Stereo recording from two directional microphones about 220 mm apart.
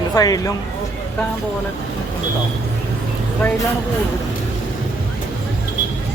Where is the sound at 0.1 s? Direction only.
15° left (ahead or behind).